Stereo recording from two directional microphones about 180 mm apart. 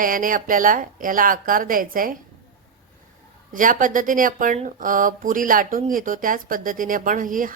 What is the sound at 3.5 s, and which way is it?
A woman's voice, 50° right (ahead or behind).